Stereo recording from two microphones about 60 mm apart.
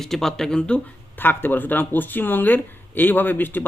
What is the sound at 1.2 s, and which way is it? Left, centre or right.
Speech, left.